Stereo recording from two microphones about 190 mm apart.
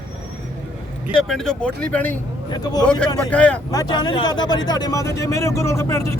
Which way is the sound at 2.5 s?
20° left (ahead or behind).